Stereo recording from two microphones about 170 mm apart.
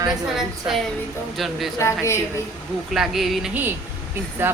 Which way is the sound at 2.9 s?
Centre (ahead or behind).